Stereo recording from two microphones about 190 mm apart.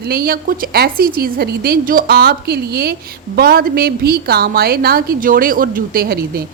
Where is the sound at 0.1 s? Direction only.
50° right (ahead or behind).